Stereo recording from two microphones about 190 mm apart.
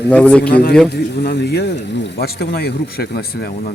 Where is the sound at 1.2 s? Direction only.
60° left (ahead or behind).